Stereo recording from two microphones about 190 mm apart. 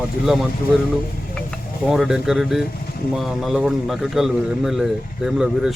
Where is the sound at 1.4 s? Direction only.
Centre (ahead or behind).